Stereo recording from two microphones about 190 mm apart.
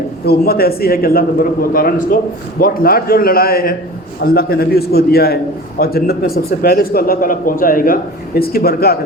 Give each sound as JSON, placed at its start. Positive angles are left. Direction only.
{"t": 0.3, "sound": "a man's voice", "side_deg": 55}